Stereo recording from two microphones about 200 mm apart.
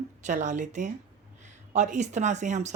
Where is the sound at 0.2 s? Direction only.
35° right (ahead or behind).